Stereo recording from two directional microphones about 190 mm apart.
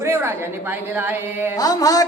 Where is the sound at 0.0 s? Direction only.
15° right (ahead or behind).